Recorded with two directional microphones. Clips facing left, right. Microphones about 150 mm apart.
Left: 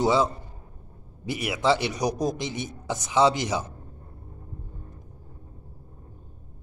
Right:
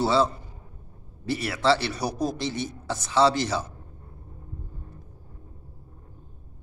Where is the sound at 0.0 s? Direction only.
15° left (ahead or behind).